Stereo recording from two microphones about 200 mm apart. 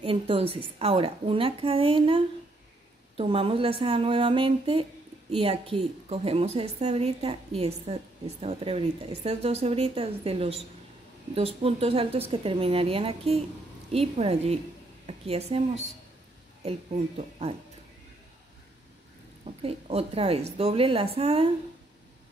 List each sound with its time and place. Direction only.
0.0 s a woman's voice: 25° right (ahead or behind)
19.6 s a woman's voice: 30° right (ahead or behind)